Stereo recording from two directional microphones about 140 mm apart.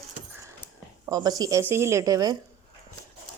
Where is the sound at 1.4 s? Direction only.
25° right (ahead or behind).